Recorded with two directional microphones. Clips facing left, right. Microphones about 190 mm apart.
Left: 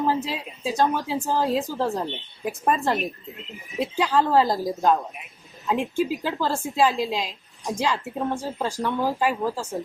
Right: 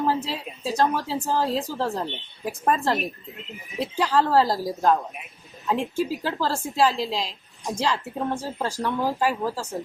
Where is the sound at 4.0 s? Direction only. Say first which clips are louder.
Even; 15° left (ahead or behind).